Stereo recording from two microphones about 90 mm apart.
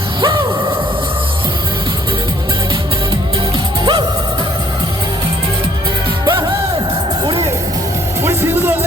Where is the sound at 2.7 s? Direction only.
70° right (ahead or behind).